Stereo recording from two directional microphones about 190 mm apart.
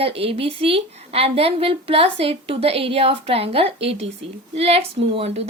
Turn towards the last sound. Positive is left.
turn(degrees=-30)  # may be behind; listen again after turning